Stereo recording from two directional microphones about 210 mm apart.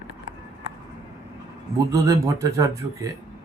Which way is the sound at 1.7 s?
15° right (ahead or behind).